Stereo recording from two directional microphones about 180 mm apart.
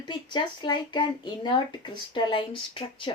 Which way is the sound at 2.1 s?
30° left (ahead or behind).